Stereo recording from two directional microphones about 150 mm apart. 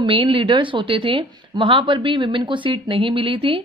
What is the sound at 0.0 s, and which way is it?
A woman's voice, 35° right (ahead or behind).